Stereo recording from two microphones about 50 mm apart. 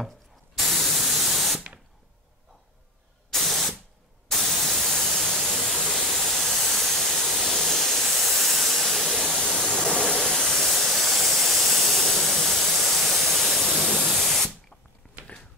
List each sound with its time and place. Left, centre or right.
0.6 s spray: centre
3.3 s spray: centre
4.3 s white noise: centre
10.2 s steam: centre
10.7 s hiss: centre
13.9 s spray: centre
15.0 s a sound: left